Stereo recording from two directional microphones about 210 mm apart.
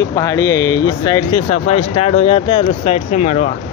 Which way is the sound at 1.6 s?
90° left.